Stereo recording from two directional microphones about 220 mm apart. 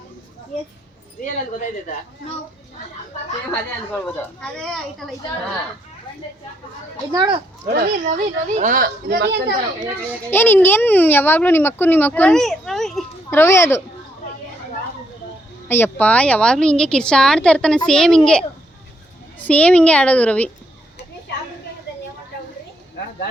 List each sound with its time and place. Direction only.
3.5 s a woman's voice: 5° left (ahead or behind)
7.1 s a child's voice: 20° right (ahead or behind)
7.7 s a woman's voice: 45° right (ahead or behind)
9.8 s a child's voice: 10° right (ahead or behind)
10.2 s a child's voice: 10° left (ahead or behind)
15.7 s a woman's voice: 10° left (ahead or behind)